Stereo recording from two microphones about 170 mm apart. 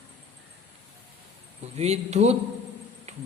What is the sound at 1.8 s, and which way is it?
Speech, 40° right (ahead or behind).